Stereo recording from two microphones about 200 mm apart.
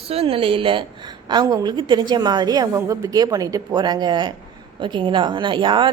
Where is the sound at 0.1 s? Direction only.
30° right (ahead or behind).